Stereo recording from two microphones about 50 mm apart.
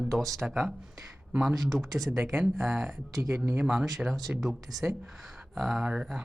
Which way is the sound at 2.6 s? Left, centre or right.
Centre.